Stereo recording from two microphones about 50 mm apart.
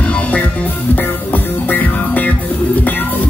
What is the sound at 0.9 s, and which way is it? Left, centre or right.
Music, left.